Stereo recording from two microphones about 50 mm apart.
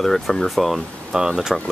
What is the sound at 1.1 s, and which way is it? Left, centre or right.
Speech, centre.